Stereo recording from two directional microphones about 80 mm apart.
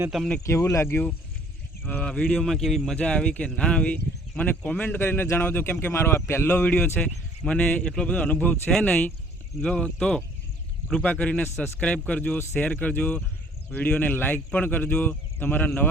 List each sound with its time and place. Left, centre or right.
0.4 s speech: left
2.0 s speech: centre; by 6.6 s left
6.6 s speech: centre